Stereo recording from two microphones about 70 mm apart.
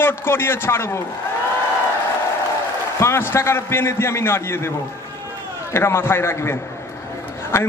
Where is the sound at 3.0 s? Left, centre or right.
Left.